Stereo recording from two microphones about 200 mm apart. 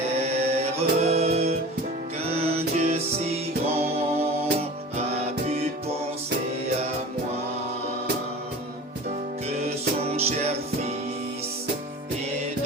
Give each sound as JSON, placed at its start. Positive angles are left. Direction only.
{"t": 0.3, "sound": "music", "side_deg": -30}
{"t": 9.6, "sound": "music", "side_deg": -30}